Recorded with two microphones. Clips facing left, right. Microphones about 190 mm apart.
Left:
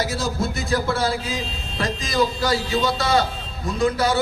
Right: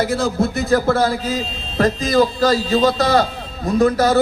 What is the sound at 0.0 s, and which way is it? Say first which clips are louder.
Speech: right 6 dB; 60° right (ahead or behind).